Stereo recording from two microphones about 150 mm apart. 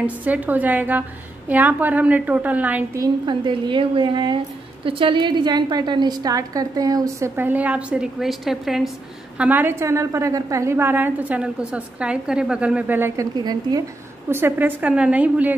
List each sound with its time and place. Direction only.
0.0 s a woman's voice: 10° right (ahead or behind)
3.0 s a woman's voice: 30° right (ahead or behind); by 8.9 s centre (ahead or behind)
9.4 s a woman's voice: 10° right (ahead or behind)
14.3 s a woman's voice: 15° right (ahead or behind)